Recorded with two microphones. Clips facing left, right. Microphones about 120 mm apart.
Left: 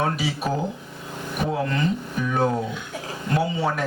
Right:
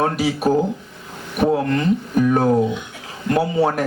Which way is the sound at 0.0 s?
40° right (ahead or behind).